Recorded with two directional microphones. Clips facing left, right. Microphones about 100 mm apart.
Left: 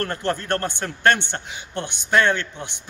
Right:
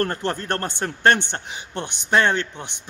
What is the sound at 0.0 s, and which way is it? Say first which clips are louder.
A man's voice: right 1 dB; 30° right (ahead or behind).